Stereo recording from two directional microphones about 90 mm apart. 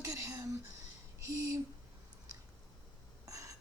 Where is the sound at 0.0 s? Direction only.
35° right (ahead or behind).